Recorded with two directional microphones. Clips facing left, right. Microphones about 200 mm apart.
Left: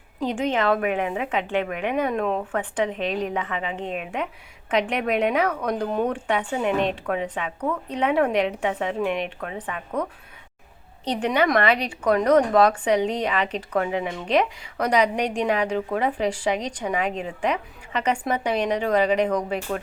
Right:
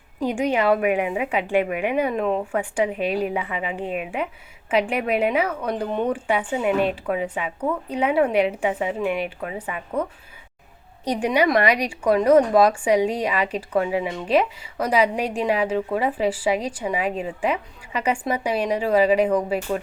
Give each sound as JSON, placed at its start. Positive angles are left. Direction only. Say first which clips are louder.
{"t": 0.2, "sound": "a woman's voice", "louder": "right 2 dB", "side_deg": -10}